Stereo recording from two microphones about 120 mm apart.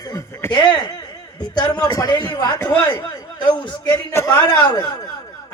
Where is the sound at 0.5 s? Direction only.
40° left (ahead or behind).